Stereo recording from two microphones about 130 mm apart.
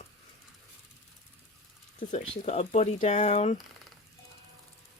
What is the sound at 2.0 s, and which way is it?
Speech, 75° left (ahead or behind).